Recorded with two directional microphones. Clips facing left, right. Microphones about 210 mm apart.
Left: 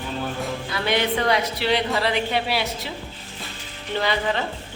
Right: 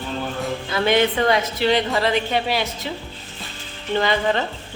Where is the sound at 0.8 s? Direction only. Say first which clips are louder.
Right 4 dB; 50° right (ahead or behind).